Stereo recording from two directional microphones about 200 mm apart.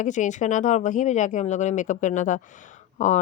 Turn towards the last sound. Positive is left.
turn(degrees=35)  # may be behind; listen again after turning